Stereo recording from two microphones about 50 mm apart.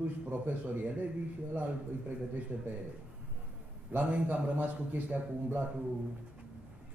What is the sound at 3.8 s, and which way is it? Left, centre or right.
A man's voice, right.